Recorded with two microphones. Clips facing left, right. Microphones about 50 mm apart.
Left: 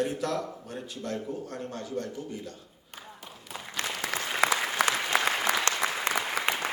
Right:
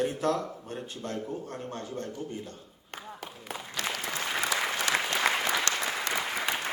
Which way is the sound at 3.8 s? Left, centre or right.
Left.